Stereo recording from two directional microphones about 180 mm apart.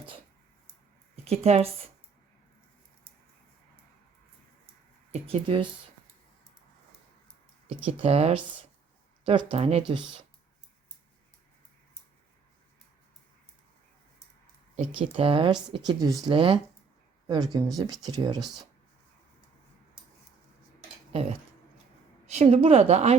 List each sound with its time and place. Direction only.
1.1 s a sound: 35° right (ahead or behind)
5.2 s speech: 30° right (ahead or behind)
7.9 s a woman's voice: 35° right (ahead or behind)
14.9 s a woman's voice: 30° right (ahead or behind)
21.1 s a woman's voice: 35° right (ahead or behind)